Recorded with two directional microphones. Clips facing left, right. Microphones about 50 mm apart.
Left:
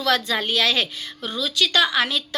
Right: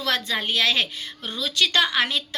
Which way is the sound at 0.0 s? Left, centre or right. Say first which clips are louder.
Left 3 dB; right.